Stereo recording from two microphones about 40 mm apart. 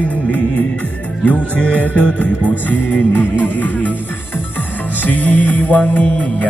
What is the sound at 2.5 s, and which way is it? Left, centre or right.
Music, left.